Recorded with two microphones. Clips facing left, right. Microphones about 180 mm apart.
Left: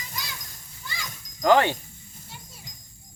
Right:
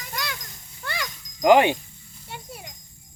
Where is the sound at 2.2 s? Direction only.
65° right (ahead or behind).